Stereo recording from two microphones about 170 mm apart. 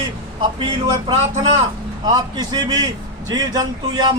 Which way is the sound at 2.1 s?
25° right (ahead or behind).